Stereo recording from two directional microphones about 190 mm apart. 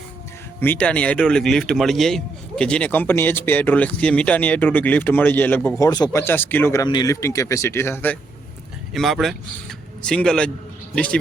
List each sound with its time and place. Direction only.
0.6 s speech: 10° left (ahead or behind)
8.9 s a man's voice: centre (ahead or behind)